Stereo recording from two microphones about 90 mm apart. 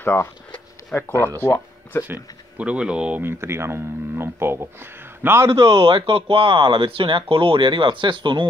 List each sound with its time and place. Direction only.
0.0 s a sound: 25° left (ahead or behind)
0.9 s speech: 20° left (ahead or behind)
2.0 s speech: 20° right (ahead or behind)
3.2 s speech: 25° right (ahead or behind)
5.9 s speech: 85° right; by 8.5 s 65° right (ahead or behind)